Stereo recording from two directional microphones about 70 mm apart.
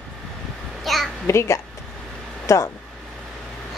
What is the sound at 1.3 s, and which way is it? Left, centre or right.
Speech, left.